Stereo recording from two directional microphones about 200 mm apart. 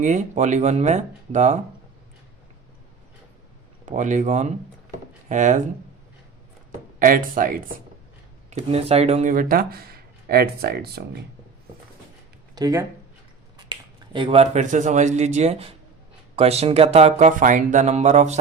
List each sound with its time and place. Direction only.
0.0 s speech: 40° right (ahead or behind)
3.8 s speech: 40° right (ahead or behind)
7.0 s speech: 45° right (ahead or behind)
8.4 s speech: 35° right (ahead or behind); by 11.0 s 50° right (ahead or behind)
12.5 s speech: 15° right (ahead or behind); by 18.3 s 35° right (ahead or behind)